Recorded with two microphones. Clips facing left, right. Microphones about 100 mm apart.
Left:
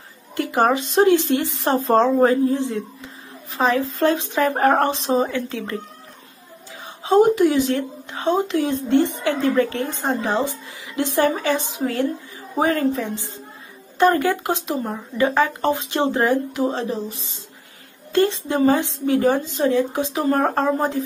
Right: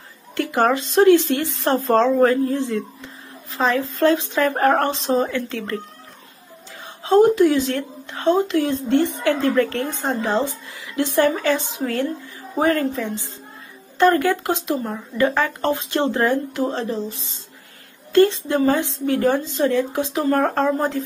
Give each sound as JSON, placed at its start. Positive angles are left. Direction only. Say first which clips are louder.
{"t": 0.3, "sound": "speech", "louder": "even", "side_deg": 20}
{"t": 7.0, "sound": "speech", "louder": "right 1 dB", "side_deg": 15}